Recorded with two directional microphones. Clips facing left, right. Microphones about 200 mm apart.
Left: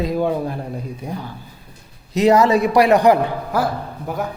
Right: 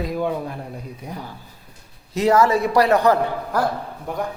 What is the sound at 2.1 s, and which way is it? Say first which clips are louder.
A man's voice: left 3 dB; 20° left (ahead or behind).